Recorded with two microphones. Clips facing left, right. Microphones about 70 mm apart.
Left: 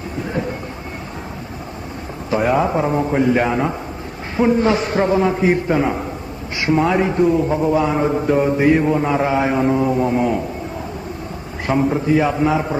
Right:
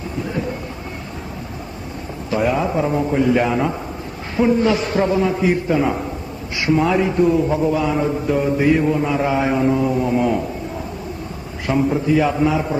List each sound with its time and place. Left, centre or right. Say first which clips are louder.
2.3 s a man's voice: left 2 dB; left
2.8 s mantra: left 1 dB; left
4.7 s a man's voice: left 1 dB; left
6.7 s mantra: even; left
7.3 s mantra: even; centre
9.6 s a man's voice: left 1 dB; left
11.6 s mantra: left 1 dB; left